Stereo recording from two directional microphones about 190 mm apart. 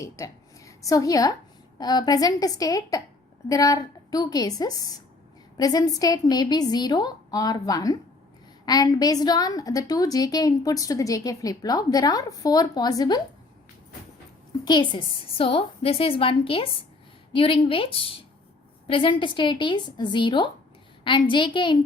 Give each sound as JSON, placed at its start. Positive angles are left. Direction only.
{"t": 0.0, "sound": "a woman's voice", "side_deg": 15}
{"t": 14.6, "sound": "a woman's voice", "side_deg": 20}